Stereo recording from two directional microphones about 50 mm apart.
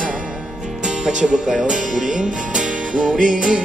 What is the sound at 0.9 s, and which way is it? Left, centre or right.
Music, centre.